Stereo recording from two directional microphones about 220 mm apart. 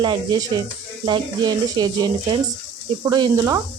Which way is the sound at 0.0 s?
20° right (ahead or behind).